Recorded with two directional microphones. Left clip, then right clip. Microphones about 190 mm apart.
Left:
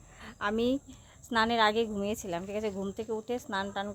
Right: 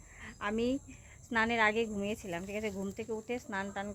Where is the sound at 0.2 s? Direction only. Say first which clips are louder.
Left 4 dB; 20° left (ahead or behind).